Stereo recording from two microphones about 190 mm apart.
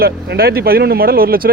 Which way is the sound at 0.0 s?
55° right (ahead or behind).